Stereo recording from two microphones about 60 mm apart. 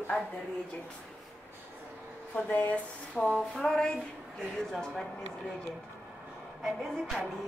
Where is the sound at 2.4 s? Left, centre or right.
Left.